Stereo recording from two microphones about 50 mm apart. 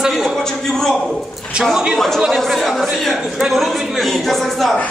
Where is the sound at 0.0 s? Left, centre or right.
Centre.